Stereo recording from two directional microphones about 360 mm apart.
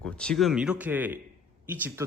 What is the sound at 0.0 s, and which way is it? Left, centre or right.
Speech, centre.